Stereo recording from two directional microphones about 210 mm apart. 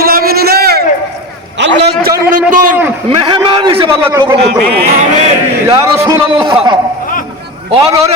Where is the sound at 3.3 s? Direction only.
20° right (ahead or behind).